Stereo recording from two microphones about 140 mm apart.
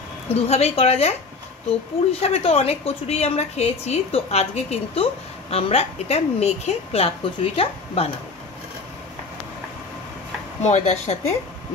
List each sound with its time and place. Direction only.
0.3 s a woman's voice: 50° left (ahead or behind)
2.2 s a woman's voice: 45° left (ahead or behind)
10.6 s a woman's voice: 55° left (ahead or behind)